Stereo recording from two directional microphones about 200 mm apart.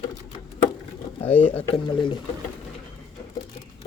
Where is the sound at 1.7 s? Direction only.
25° left (ahead or behind).